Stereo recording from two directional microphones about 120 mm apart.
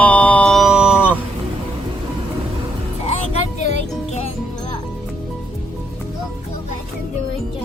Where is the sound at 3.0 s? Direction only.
65° left (ahead or behind).